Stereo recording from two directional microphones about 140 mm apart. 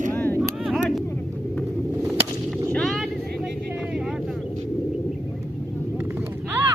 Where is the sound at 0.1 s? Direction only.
15° left (ahead or behind).